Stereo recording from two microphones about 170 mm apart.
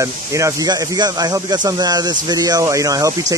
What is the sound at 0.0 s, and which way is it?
Speech, 20° right (ahead or behind).